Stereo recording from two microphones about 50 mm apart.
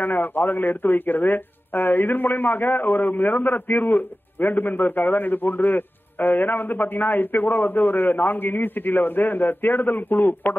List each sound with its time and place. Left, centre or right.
0.0 s a man's voice: left